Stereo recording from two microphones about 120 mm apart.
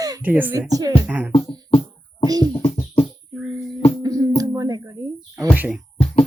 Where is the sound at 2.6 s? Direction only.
50° left (ahead or behind).